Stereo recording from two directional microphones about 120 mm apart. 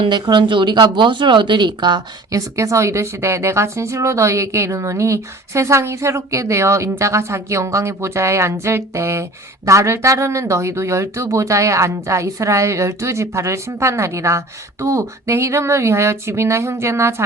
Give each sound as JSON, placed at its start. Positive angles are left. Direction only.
{"t": 0.0, "sound": "speech", "side_deg": -40}
{"t": 2.6, "sound": "speech", "side_deg": -25}